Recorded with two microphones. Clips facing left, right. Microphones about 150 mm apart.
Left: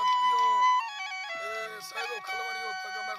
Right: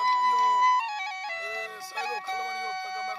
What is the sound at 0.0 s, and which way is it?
Music, 25° right (ahead or behind).